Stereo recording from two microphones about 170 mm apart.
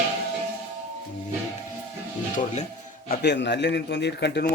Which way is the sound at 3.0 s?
70° left (ahead or behind).